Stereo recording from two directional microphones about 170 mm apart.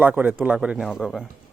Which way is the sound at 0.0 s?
10° right (ahead or behind).